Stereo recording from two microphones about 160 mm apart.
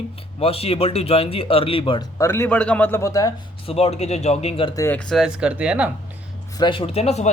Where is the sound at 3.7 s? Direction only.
40° left (ahead or behind).